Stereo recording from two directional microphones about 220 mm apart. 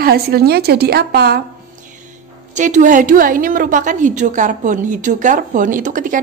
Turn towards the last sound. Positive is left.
turn(degrees=-35)  # may be behind; listen again after turning